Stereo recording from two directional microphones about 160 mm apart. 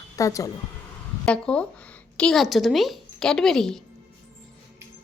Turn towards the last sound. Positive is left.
turn(degrees=5)  # may be behind; listen again after turning